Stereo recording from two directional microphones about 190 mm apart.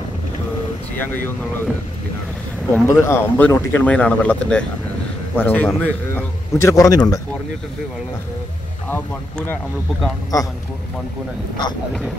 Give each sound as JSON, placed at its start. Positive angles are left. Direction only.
{"t": 0.9, "sound": "speech", "side_deg": 10}
{"t": 2.7, "sound": "speech", "side_deg": 10}
{"t": 10.3, "sound": "speech", "side_deg": 20}